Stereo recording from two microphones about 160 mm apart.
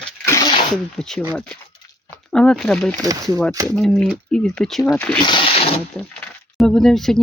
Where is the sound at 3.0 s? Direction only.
20° right (ahead or behind).